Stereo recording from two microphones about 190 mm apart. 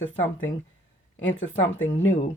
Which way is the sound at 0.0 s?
90° left.